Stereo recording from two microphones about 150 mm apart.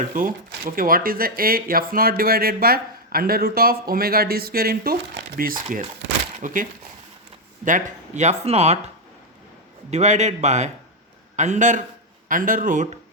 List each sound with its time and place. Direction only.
0.1 s speech: 65° right (ahead or behind); by 4.9 s 90° right
5.7 s a man's voice: 60° right (ahead or behind); by 8.8 s 45° right (ahead or behind)
9.9 s speech: 50° right (ahead or behind)
12.3 s a man's voice: 65° right (ahead or behind)